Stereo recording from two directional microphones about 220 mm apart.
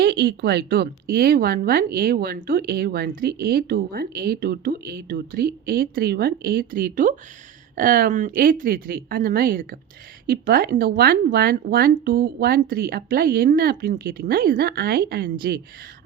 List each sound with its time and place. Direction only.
0.0 s speech: 45° right (ahead or behind)